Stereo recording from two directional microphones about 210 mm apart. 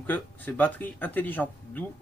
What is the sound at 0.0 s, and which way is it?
Speech, 10° left (ahead or behind).